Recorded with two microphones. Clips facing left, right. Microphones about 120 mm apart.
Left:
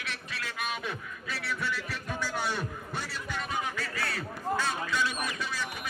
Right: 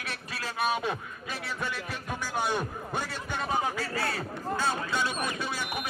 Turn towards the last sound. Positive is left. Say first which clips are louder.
# right 2 dB
turn(degrees=-25)  # may be behind; listen again after turning